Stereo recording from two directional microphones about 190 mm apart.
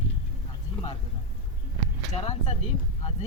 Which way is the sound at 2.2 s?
35° left (ahead or behind).